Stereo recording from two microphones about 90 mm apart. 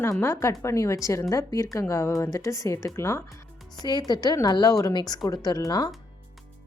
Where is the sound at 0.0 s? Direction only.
30° left (ahead or behind).